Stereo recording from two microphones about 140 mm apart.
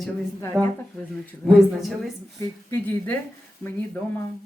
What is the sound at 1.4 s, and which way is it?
Speech, centre (ahead or behind).